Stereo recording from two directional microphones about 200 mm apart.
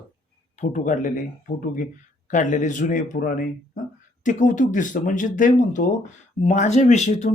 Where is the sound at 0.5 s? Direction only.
40° left (ahead or behind).